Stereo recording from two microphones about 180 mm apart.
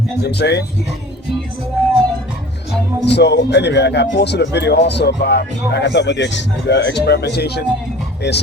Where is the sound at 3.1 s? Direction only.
70° left (ahead or behind).